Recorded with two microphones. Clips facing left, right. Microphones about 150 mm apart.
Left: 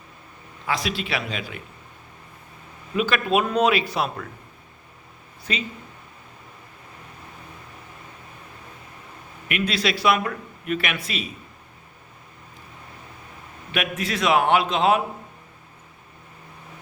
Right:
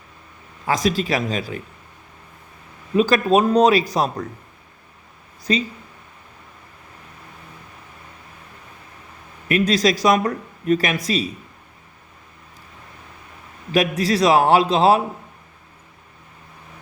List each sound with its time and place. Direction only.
0.7 s speech: 40° right (ahead or behind)
2.9 s speech: 35° right (ahead or behind)
5.4 s a sound: 35° right (ahead or behind)
9.5 s speech: 40° right (ahead or behind)
13.7 s speech: 35° right (ahead or behind)